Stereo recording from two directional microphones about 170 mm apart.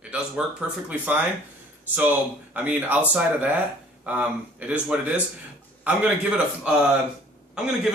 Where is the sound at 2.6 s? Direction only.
10° right (ahead or behind).